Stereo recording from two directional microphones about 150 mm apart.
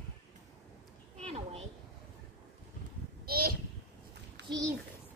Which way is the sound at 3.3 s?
90° right.